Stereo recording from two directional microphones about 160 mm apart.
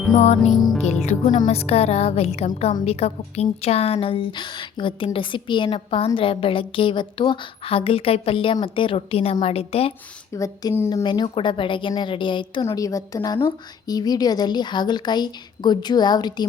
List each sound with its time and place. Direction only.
0.1 s music: 45° left (ahead or behind)
1.5 s a woman's voice: 40° left (ahead or behind)
10.3 s a woman's voice: 20° left (ahead or behind)
12.6 s a woman's voice: 20° left (ahead or behind)